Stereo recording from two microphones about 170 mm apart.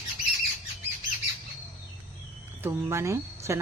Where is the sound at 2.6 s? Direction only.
15° right (ahead or behind).